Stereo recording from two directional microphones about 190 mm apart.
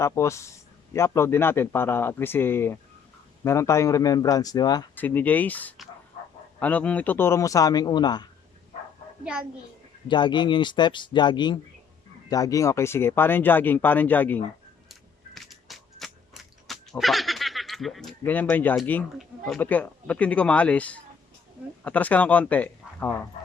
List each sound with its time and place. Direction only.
0.0 s speech: 15° left (ahead or behind)
4.9 s speech: 10° left (ahead or behind)
10.1 s speech: 25° left (ahead or behind)
15.4 s fowl: centre (ahead or behind)
18.2 s speech: 10° left (ahead or behind)